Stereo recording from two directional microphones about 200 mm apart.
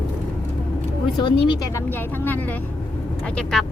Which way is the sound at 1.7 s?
10° left (ahead or behind).